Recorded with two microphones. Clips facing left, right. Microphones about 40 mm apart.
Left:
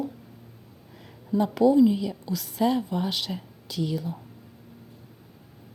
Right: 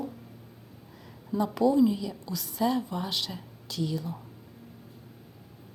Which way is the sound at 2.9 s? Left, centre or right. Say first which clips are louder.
Left 4 dB; centre.